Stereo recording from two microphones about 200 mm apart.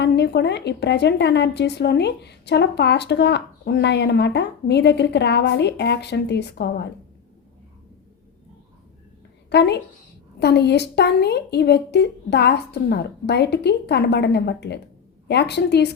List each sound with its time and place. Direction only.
0.0 s speech: 55° left (ahead or behind)
9.5 s speech: 55° left (ahead or behind)